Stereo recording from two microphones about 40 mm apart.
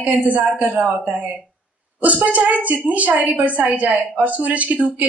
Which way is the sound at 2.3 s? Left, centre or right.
Right.